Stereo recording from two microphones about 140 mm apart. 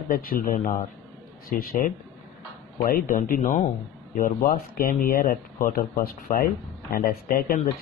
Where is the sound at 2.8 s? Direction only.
80° left.